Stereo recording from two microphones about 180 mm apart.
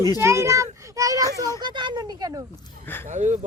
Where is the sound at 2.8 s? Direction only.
10° left (ahead or behind).